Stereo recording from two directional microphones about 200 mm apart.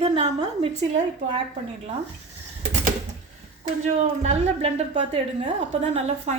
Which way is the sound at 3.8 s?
35° right (ahead or behind).